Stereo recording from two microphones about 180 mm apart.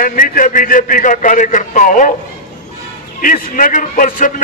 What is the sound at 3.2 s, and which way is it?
A man's voice, 50° left (ahead or behind).